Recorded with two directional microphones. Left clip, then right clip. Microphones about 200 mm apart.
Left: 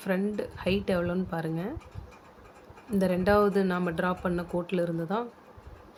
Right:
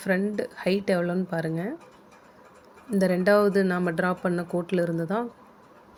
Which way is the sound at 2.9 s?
15° right (ahead or behind).